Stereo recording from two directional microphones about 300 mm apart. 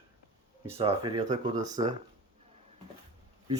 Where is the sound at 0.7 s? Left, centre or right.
Centre.